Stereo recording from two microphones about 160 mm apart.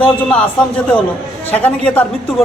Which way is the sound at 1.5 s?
10° left (ahead or behind).